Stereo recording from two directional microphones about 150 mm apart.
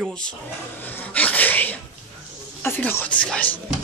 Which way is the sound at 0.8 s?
10° left (ahead or behind).